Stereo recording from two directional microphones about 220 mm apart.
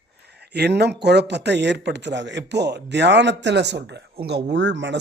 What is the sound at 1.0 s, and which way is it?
Speech, 50° right (ahead or behind).